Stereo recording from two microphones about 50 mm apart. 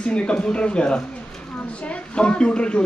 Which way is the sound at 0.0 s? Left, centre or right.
Left.